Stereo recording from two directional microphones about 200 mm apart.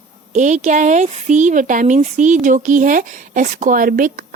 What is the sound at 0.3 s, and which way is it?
A woman's voice, 35° right (ahead or behind).